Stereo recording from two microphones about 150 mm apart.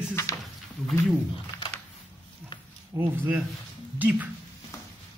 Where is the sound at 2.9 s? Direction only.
15° right (ahead or behind).